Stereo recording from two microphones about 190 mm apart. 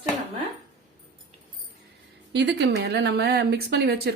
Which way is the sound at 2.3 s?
65° right (ahead or behind).